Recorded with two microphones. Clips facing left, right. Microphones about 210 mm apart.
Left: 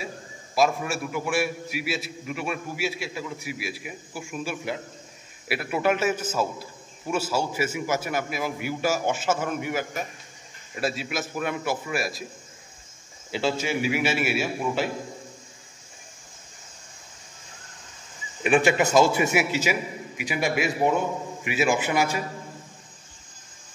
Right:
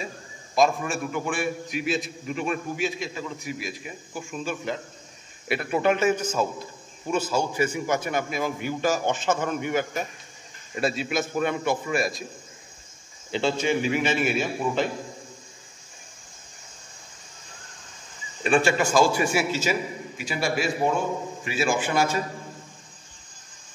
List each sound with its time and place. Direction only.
0.6 s a man's voice: 5° left (ahead or behind)
13.3 s a man's voice: 5° left (ahead or behind)
18.4 s a man's voice: 20° left (ahead or behind)